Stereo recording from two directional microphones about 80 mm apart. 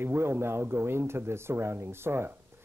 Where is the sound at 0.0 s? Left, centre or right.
Right.